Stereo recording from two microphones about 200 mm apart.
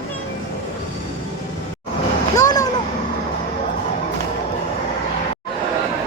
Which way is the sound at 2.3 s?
20° left (ahead or behind).